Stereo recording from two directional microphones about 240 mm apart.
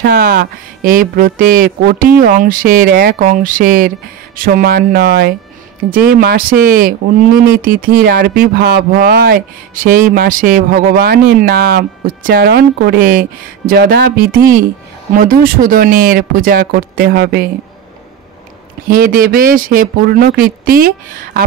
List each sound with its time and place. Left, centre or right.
0.0 s speech: right
18.9 s speech: right